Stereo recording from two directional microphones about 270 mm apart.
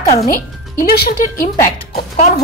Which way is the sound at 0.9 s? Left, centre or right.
Left.